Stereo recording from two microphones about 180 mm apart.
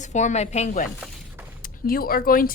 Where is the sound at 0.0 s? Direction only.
40° left (ahead or behind).